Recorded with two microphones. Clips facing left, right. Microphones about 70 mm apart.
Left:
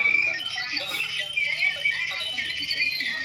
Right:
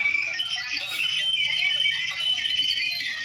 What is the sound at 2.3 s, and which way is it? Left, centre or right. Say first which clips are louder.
Music: right 3 dB; left.